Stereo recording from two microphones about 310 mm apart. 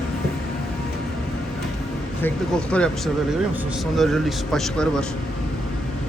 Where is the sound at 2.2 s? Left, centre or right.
Centre.